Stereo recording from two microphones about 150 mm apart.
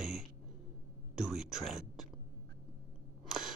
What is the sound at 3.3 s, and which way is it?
Camera, 5° right (ahead or behind).